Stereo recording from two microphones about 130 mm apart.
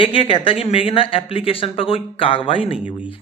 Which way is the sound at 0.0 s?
40° left (ahead or behind).